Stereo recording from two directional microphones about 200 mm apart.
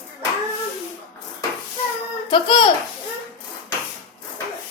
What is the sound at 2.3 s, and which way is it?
Speech, 25° left (ahead or behind).